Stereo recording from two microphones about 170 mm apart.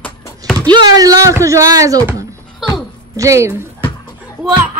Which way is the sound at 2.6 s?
Centre (ahead or behind).